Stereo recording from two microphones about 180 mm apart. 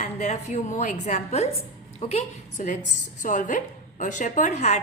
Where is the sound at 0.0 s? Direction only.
40° left (ahead or behind).